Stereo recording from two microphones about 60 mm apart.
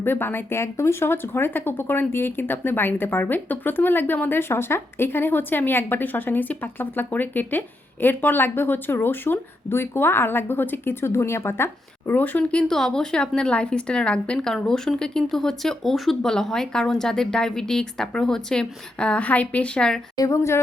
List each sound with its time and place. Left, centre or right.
0.0 s speech: left
11.0 s speech: left
12.5 s speech: centre
20.1 s a woman's voice: left